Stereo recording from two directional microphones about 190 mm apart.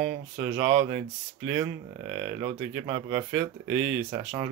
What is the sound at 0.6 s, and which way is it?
Speech, 15° right (ahead or behind).